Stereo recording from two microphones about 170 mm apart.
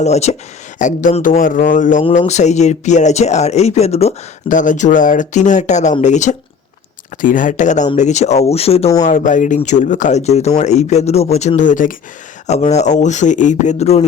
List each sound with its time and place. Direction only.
0.0 s speech: 40° left (ahead or behind)
2.0 s speech: 40° left (ahead or behind)
9.0 s speech: 45° left (ahead or behind)